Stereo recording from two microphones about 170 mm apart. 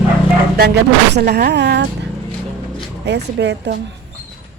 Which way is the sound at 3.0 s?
85° right.